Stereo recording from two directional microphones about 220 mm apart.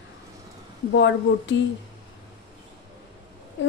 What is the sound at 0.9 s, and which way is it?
Speech, 55° left (ahead or behind).